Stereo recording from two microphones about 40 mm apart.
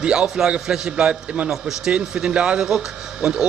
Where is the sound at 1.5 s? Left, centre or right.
Centre.